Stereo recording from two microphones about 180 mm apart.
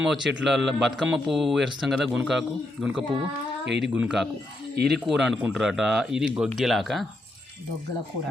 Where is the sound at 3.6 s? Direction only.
70° right (ahead or behind).